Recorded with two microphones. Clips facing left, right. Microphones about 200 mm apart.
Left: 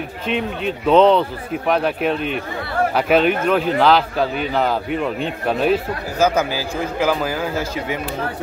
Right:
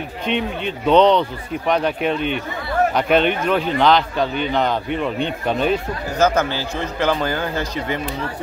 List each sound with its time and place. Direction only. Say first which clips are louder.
0.3 s speech: left 1 dB; centre (ahead or behind)